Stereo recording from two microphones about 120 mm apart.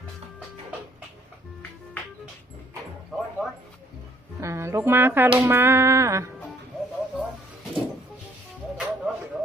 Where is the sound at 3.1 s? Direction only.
5° left (ahead or behind).